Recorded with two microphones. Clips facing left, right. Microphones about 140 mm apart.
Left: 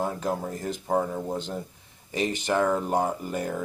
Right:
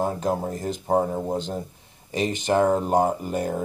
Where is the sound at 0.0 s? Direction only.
30° right (ahead or behind).